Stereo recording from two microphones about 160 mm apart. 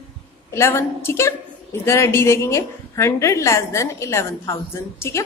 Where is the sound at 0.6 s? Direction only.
15° left (ahead or behind).